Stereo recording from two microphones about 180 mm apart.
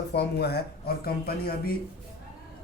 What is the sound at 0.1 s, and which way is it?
Speech, 65° left (ahead or behind).